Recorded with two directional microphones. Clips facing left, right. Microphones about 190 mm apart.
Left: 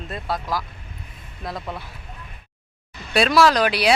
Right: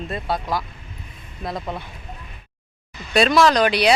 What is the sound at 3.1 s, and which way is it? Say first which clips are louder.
Speech: right 1 dB; 5° left (ahead or behind).